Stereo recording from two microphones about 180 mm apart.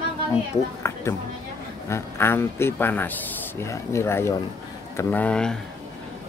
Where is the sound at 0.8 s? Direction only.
15° left (ahead or behind).